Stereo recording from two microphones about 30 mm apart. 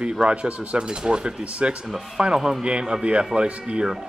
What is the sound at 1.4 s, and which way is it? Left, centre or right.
Speech, right.